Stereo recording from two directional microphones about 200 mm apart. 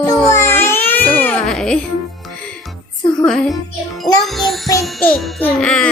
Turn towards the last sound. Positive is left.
turn(degrees=5)  # may be behind; listen again after turning